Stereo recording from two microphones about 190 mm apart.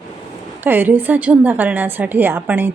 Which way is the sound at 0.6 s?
10° right (ahead or behind).